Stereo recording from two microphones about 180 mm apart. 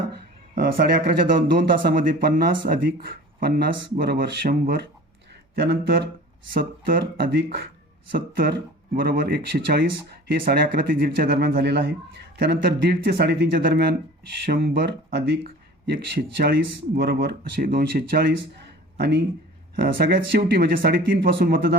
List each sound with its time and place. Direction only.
0.5 s speech: 50° right (ahead or behind)
5.5 s speech: 65° right (ahead or behind)
6.5 s speech: 55° right (ahead or behind)
7.3 s speech: 70° right (ahead or behind)
19.7 s speech: 60° right (ahead or behind)